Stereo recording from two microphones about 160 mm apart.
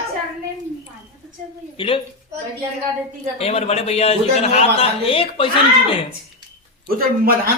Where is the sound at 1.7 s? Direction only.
30° left (ahead or behind).